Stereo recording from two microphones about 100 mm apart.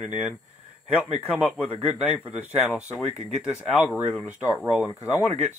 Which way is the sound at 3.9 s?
10° right (ahead or behind).